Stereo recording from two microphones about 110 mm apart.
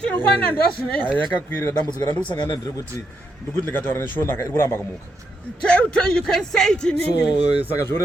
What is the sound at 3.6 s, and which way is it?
A man's voice, 20° left (ahead or behind).